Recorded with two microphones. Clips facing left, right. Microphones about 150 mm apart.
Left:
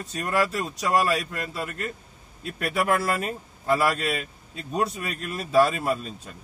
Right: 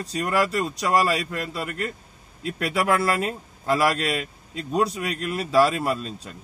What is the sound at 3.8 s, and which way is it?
Speech, 90° right.